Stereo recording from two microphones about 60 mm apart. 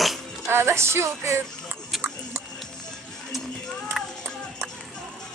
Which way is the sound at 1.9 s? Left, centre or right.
Centre.